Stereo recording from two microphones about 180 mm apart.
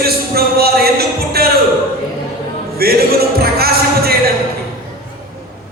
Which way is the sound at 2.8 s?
60° right (ahead or behind).